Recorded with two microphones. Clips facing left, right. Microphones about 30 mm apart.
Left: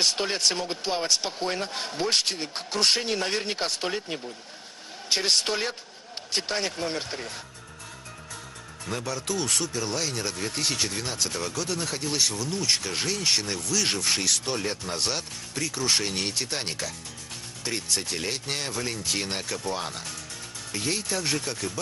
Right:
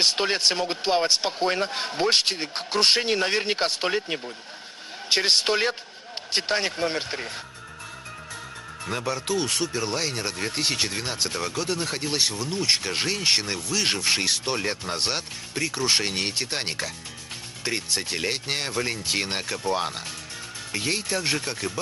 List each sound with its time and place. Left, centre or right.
0.0 s speech: right
8.8 s speech: right